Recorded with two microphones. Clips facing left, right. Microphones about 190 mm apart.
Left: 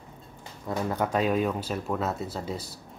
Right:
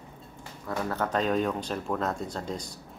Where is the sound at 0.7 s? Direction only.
15° left (ahead or behind).